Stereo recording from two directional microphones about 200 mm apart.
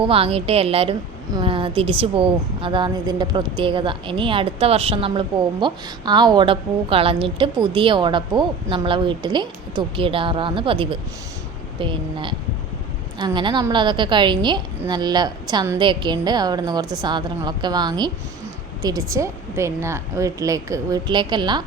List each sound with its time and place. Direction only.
0.0 s a woman's voice: 30° right (ahead or behind)